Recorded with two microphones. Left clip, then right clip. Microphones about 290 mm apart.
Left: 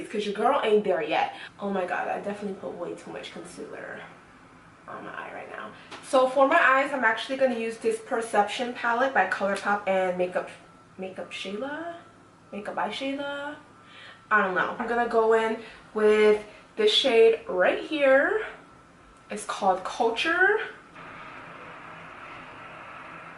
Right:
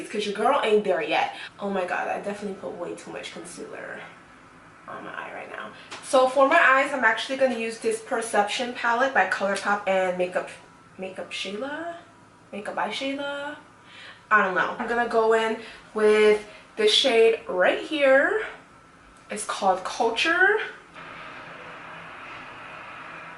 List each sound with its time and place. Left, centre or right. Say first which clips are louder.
0.1 s speech: right 2 dB; centre
2.6 s speech: right 1 dB; centre
3.7 s speech: right 2 dB; centre